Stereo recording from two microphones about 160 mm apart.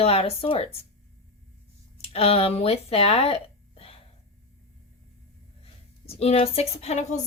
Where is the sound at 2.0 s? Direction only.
40° left (ahead or behind).